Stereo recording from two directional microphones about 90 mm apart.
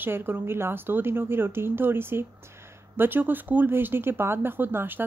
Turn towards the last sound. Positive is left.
turn(degrees=-20)  # may be behind; listen again after turning